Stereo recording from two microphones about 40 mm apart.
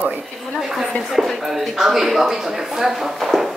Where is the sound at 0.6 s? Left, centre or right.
Centre.